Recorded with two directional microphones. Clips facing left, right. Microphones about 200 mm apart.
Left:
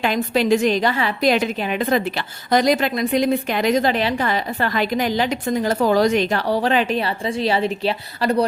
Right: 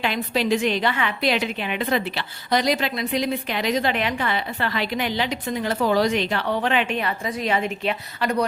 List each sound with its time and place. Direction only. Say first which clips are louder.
0.0 s a woman's voice: left 4 dB; 45° left (ahead or behind)